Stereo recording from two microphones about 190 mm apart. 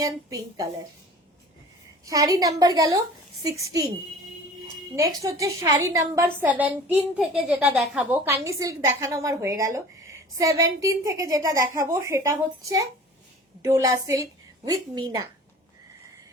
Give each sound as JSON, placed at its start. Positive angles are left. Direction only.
{"t": 0.0, "sound": "a woman's voice", "side_deg": -15}
{"t": 2.0, "sound": "a woman's voice", "side_deg": -15}
{"t": 4.9, "sound": "a woman's voice", "side_deg": -15}